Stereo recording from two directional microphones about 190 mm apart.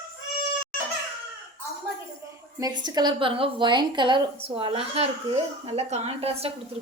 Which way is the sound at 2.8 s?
25° right (ahead or behind).